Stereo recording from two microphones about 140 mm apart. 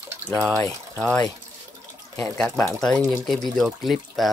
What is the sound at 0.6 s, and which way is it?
Speech, 10° left (ahead or behind).